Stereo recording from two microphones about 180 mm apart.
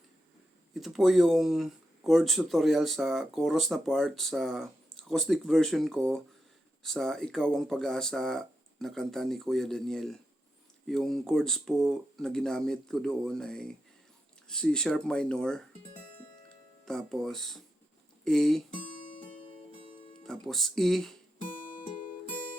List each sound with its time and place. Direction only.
0.7 s speech: centre (ahead or behind)
16.8 s speech: centre (ahead or behind)
18.7 s guitar: 30° left (ahead or behind)
20.2 s speech: centre (ahead or behind)
21.5 s guitar: 45° left (ahead or behind)
21.9 s music: 45° left (ahead or behind)